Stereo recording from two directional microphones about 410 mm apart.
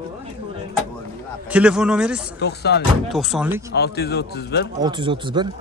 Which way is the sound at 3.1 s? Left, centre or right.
Centre.